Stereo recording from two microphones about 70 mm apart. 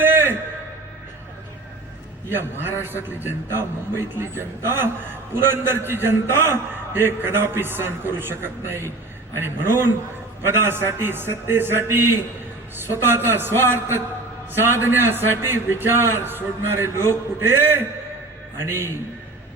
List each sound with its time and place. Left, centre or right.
0.0 s music: right
2.3 s a man's voice: right
14.6 s a man's voice: right